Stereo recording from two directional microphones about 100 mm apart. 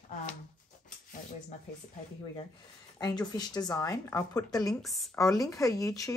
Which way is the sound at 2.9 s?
45° left (ahead or behind).